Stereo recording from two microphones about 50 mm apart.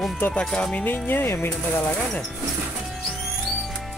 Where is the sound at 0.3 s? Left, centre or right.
Centre.